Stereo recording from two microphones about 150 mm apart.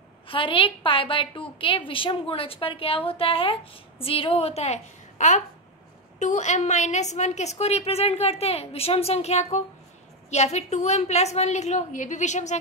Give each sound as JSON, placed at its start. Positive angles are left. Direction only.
{"t": 0.3, "sound": "a woman's voice", "side_deg": 35}